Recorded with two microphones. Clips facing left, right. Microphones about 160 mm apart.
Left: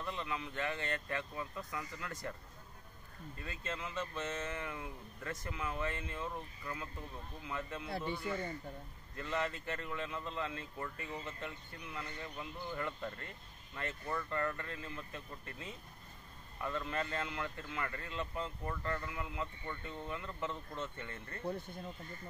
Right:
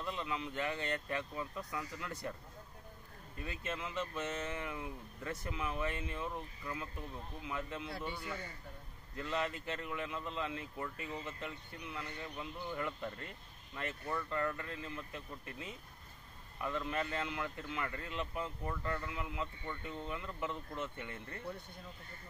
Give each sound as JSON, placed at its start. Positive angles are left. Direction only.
{"t": 0.0, "sound": "speech", "side_deg": -15}
{"t": 3.3, "sound": "speech", "side_deg": -20}
{"t": 7.4, "sound": "speech", "side_deg": -15}
{"t": 7.9, "sound": "speech", "side_deg": 25}
{"t": 9.1, "sound": "speech", "side_deg": -15}
{"t": 19.0, "sound": "speech", "side_deg": -15}